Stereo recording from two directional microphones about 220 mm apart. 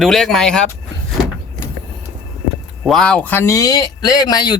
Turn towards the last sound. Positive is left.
turn(degrees=20)  # may be behind; listen again after turning